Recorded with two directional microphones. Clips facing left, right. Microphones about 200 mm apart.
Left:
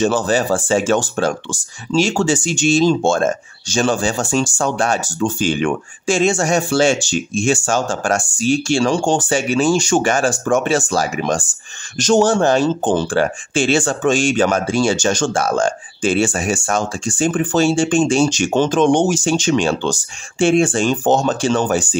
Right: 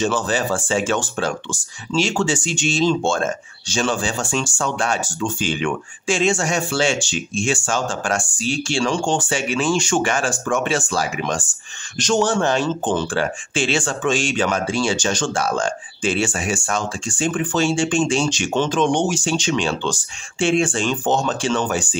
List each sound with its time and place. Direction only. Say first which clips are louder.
0.0 s speech: left 4 dB; 40° left (ahead or behind)